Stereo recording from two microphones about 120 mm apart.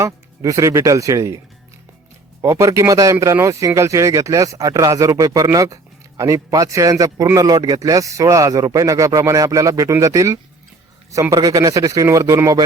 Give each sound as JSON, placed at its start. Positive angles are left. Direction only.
{"t": 0.0, "sound": "speech", "side_deg": -25}
{"t": 2.4, "sound": "speech", "side_deg": -25}